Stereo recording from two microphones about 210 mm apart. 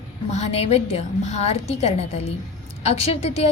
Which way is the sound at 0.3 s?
30° left (ahead or behind).